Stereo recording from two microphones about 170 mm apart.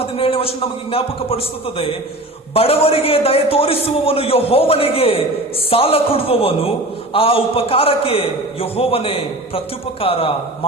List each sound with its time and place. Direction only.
0.0 s a man's voice: 35° left (ahead or behind)
2.5 s a man's voice: 35° left (ahead or behind)